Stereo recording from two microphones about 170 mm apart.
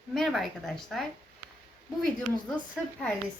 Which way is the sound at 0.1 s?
Centre (ahead or behind).